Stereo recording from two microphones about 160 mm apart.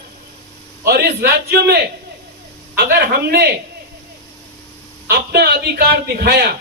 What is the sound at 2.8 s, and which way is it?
Speech, 80° right.